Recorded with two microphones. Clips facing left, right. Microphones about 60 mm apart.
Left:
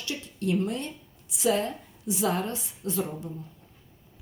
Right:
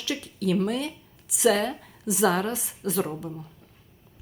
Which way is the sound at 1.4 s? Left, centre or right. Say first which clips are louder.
Right 3 dB; right.